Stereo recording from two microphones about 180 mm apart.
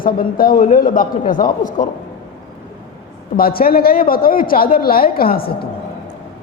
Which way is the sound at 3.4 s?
55° left (ahead or behind).